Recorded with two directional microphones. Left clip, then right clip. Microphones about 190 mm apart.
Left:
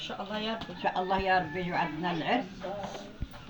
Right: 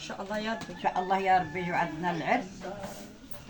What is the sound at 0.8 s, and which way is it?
Speech, 20° right (ahead or behind).